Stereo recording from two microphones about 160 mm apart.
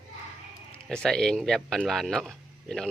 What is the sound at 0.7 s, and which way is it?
Speech, 5° left (ahead or behind).